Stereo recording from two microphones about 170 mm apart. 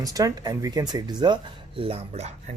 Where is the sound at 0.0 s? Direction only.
20° right (ahead or behind).